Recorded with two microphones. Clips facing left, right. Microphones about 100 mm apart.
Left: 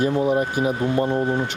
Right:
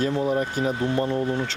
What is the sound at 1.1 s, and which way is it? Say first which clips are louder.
Speech: left 3 dB; 35° left (ahead or behind).